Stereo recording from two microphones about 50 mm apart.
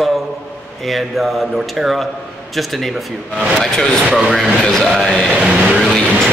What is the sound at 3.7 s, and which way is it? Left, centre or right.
Speech, centre.